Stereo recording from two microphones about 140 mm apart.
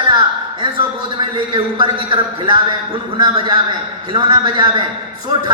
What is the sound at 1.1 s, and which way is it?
A man's voice, 35° right (ahead or behind).